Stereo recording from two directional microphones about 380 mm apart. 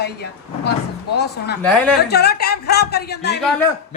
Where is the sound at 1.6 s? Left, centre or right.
Centre.